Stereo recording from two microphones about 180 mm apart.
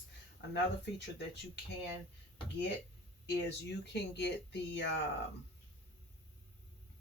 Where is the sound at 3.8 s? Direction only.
70° left (ahead or behind).